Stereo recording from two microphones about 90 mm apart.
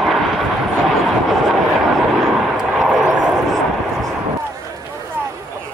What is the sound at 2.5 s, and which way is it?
Vehicle, 5° right (ahead or behind).